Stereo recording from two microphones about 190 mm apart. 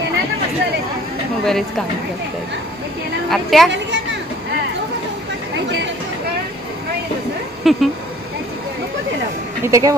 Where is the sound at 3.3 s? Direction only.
Centre (ahead or behind).